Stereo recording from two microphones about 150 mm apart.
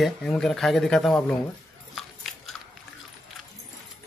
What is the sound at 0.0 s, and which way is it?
Speech, centre (ahead or behind).